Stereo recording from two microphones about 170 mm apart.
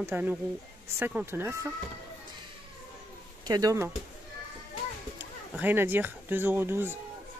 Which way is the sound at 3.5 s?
20° right (ahead or behind).